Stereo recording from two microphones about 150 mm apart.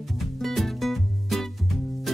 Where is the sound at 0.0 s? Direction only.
Centre (ahead or behind).